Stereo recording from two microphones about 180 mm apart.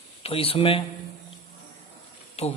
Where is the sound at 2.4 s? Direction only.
35° left (ahead or behind).